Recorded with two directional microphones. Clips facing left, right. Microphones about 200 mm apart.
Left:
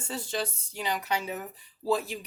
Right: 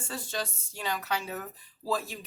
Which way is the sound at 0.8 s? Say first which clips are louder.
Left 2 dB; 15° left (ahead or behind).